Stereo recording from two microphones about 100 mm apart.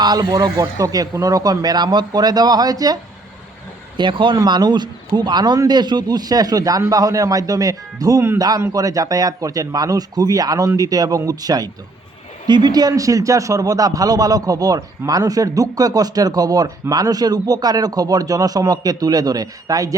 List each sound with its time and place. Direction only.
0.0 s a man's voice: 40° right (ahead or behind)
3.9 s a man's voice: 55° right (ahead or behind); by 20.0 s 35° right (ahead or behind)